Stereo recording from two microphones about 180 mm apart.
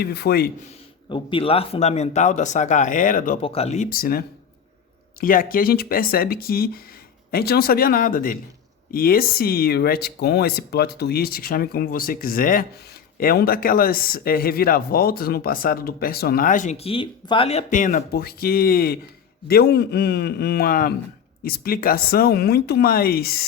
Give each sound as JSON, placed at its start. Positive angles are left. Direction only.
{"t": 0.0, "sound": "speech", "side_deg": 60}
{"t": 1.1, "sound": "speech", "side_deg": 30}
{"t": 3.4, "sound": "speech", "side_deg": 35}
{"t": 3.8, "sound": "speech", "side_deg": 55}
{"t": 5.2, "sound": "speech", "side_deg": 50}